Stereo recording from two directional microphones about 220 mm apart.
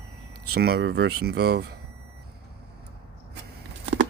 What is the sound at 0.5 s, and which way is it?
Speech, 45° right (ahead or behind).